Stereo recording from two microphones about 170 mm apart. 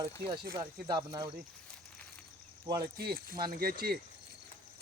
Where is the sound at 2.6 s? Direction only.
20° right (ahead or behind).